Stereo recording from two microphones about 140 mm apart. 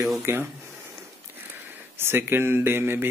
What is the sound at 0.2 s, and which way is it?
Speech, 15° right (ahead or behind).